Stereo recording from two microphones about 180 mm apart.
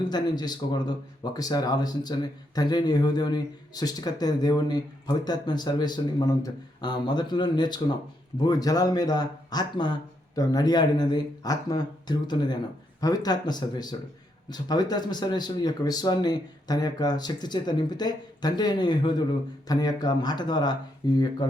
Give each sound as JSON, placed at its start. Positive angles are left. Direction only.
{"t": 0.1, "sound": "speech", "side_deg": 25}